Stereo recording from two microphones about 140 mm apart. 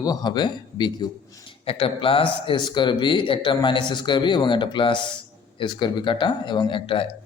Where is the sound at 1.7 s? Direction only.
40° left (ahead or behind).